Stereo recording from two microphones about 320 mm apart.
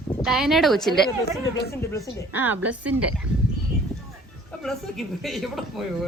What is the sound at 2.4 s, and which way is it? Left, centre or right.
Speech, centre.